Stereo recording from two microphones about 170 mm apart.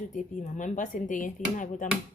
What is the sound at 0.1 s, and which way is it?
Speech, 45° left (ahead or behind).